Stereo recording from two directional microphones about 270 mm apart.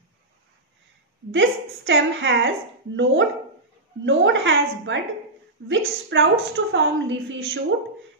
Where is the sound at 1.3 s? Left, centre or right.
Right.